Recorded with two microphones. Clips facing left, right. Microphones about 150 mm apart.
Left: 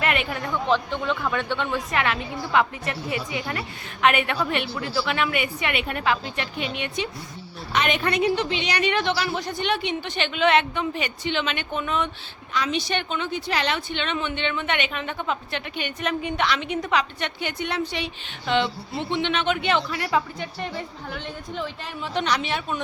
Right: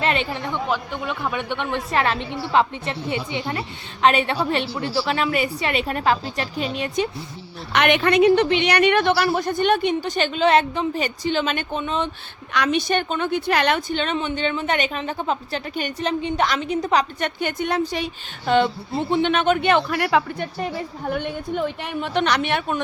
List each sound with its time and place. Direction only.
0.0 s speech: 30° right (ahead or behind)
0.7 s speech: 10° right (ahead or behind)
1.9 s a woman's voice: 35° right (ahead or behind)
7.7 s a woman's voice: 70° right (ahead or behind); by 12.1 s 30° right (ahead or behind)
12.5 s a woman's voice: 65° right (ahead or behind)
12.9 s a woman's voice: 45° right (ahead or behind); by 20.5 s 65° right (ahead or behind)
20.6 s a woman's voice: 50° right (ahead or behind)